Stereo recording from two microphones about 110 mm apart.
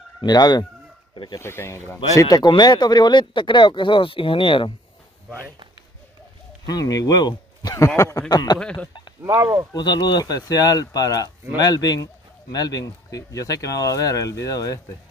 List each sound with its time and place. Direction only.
0.2 s speech: 40° left (ahead or behind)
1.4 s speech: 20° left (ahead or behind)
2.1 s speech: 35° left (ahead or behind)
6.6 s speech: 35° left (ahead or behind)
8.5 s speech: 10° left (ahead or behind)
9.2 s speech: 20° right (ahead or behind)
9.8 s speech: 40° left (ahead or behind)